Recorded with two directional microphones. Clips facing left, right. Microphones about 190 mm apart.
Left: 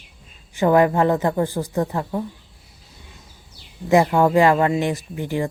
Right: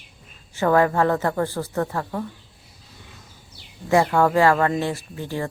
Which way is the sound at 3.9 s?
15° left (ahead or behind).